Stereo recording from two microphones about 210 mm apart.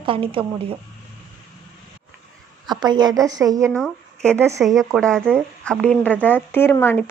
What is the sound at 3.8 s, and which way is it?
Speech, 5° left (ahead or behind).